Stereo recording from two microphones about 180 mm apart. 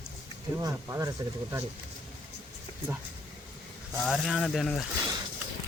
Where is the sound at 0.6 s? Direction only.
15° right (ahead or behind).